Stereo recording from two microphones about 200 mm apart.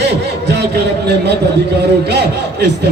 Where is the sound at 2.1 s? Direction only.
55° right (ahead or behind).